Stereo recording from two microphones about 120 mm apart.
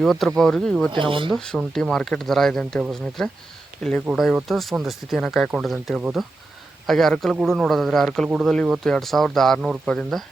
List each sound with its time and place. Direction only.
0.0 s speech: centre (ahead or behind)
0.9 s speech: 45° right (ahead or behind)
1.3 s speech: centre (ahead or behind)